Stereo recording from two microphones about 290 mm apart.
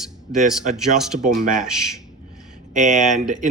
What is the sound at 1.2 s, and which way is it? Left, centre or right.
Speech, right.